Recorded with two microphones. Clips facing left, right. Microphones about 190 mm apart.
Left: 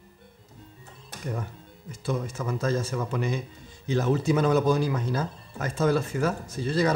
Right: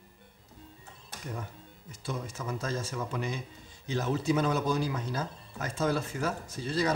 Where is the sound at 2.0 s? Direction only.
75° left (ahead or behind).